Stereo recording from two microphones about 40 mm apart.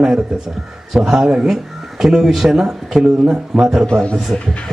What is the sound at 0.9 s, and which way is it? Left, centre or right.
Speech, centre.